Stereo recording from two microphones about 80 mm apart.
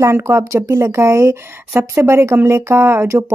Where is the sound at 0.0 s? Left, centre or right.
Right.